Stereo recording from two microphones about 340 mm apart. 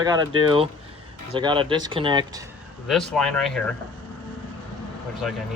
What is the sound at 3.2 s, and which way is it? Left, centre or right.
Speech, centre.